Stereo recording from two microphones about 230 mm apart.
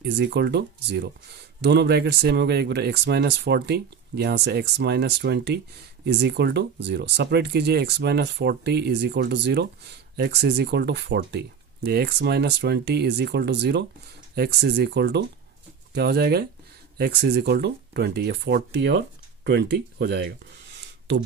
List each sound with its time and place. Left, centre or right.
0.0 s speech: right